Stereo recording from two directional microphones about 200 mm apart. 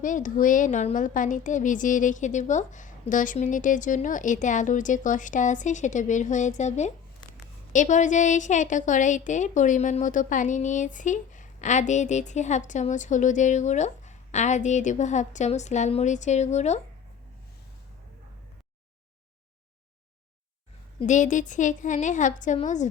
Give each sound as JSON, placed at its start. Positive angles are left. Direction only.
{"t": 0.0, "sound": "a woman's voice", "side_deg": 40}
{"t": 21.0, "sound": "a woman's voice", "side_deg": 40}